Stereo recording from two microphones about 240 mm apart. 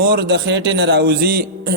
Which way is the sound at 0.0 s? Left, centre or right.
Right.